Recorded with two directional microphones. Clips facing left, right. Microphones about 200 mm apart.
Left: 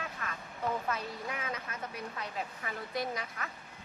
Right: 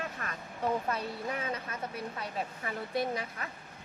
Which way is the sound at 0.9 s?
30° right (ahead or behind).